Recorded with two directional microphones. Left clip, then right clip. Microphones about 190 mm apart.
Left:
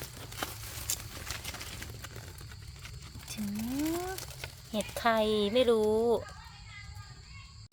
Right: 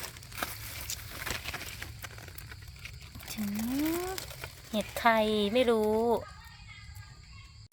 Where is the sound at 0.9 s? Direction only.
30° left (ahead or behind).